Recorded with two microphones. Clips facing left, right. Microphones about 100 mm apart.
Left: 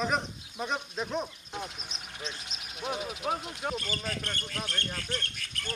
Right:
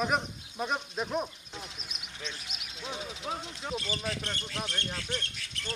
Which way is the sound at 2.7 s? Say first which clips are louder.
Left 5 dB; 60° left (ahead or behind).